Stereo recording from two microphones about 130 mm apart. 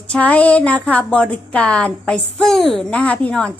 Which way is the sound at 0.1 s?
10° left (ahead or behind).